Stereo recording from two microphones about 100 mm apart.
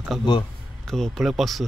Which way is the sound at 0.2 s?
50° left (ahead or behind).